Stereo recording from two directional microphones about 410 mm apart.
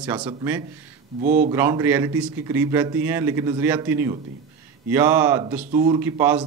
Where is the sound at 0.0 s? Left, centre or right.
Centre.